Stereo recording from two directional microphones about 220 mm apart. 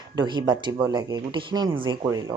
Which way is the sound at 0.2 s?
20° right (ahead or behind).